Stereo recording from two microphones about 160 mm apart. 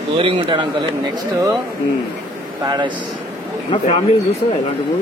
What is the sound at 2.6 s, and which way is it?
Speech, 25° right (ahead or behind).